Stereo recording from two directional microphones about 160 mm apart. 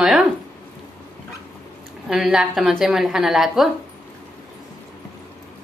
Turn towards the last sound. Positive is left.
turn(degrees=0)  # may be behind; listen again after turning